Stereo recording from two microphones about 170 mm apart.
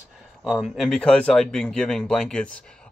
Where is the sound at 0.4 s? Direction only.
Centre (ahead or behind).